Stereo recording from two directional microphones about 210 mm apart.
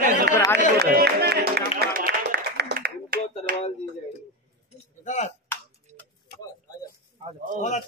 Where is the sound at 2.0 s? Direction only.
45° right (ahead or behind).